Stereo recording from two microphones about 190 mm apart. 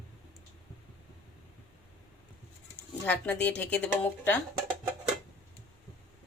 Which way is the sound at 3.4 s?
5° left (ahead or behind).